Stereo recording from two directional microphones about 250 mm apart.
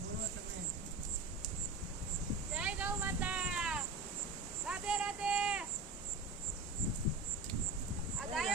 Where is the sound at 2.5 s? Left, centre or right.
Centre.